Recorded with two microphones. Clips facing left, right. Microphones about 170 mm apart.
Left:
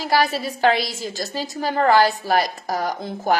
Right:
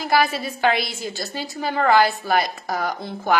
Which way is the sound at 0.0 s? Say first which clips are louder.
Even; 35° left (ahead or behind).